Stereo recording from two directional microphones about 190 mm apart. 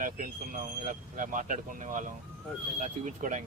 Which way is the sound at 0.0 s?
45° right (ahead or behind).